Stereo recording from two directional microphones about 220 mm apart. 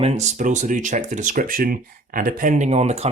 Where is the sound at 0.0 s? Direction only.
30° right (ahead or behind).